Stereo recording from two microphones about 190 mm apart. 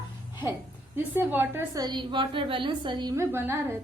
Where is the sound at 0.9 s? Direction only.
10° right (ahead or behind).